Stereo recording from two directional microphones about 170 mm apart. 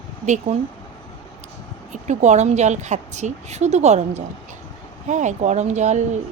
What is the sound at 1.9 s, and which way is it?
A woman's voice, 45° right (ahead or behind).